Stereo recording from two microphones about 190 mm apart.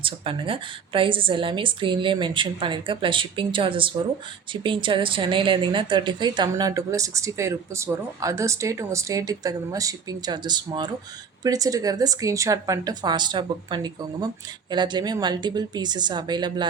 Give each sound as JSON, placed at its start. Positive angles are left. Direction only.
{"t": 0.0, "sound": "a woman's voice", "side_deg": -30}